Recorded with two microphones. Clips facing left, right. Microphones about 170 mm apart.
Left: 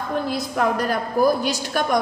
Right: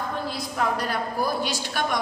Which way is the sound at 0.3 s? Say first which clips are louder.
Left 5 dB; 50° left (ahead or behind).